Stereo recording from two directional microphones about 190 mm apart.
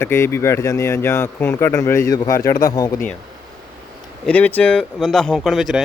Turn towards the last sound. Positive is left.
turn(degrees=0)  # may be behind; listen again after turning